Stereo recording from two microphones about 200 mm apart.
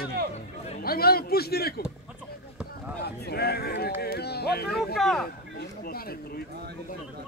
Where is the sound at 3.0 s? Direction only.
55° left (ahead or behind).